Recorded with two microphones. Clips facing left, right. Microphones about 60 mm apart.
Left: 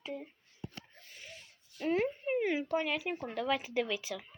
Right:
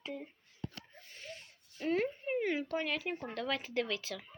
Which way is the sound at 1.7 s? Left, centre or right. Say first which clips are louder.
Left 2 dB; centre.